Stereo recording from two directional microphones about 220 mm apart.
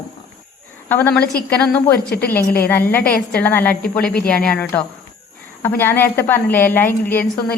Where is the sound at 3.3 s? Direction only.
10° left (ahead or behind).